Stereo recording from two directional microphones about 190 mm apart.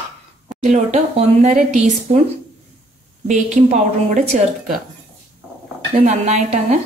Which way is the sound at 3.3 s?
40° right (ahead or behind).